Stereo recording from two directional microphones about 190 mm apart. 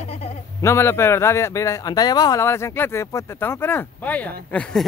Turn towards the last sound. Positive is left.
turn(degrees=5)  # may be behind; listen again after turning